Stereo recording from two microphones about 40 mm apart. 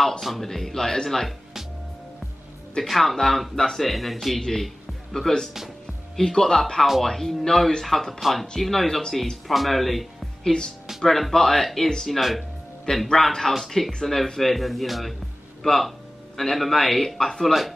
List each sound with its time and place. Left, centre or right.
0.2 s speech: centre
2.8 s speech: centre
10.4 s speech: centre
11.0 s speech: centre